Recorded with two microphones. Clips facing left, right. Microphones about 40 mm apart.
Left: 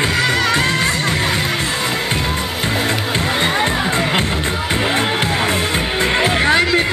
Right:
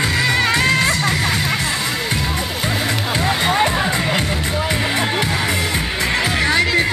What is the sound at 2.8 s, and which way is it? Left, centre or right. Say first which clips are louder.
Music: left 1 dB; centre.